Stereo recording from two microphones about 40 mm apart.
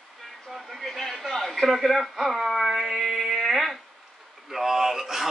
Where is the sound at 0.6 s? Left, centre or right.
Centre.